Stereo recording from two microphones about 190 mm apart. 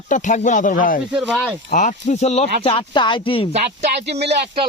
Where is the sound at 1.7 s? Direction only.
40° left (ahead or behind).